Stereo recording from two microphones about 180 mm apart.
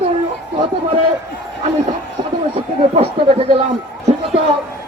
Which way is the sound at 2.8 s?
30° right (ahead or behind).